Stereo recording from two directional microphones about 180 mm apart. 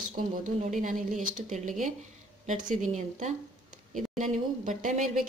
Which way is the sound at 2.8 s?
40° right (ahead or behind).